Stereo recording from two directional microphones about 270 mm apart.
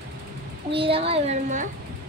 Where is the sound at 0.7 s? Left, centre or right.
Centre.